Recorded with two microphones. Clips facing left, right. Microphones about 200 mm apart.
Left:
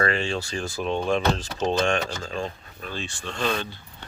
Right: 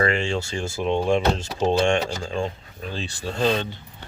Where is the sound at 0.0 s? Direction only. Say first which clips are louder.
Right 2 dB; 25° right (ahead or behind).